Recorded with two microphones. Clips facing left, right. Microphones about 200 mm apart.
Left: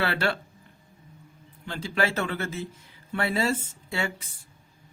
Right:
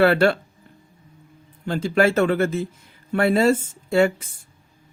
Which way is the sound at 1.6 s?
45° right (ahead or behind).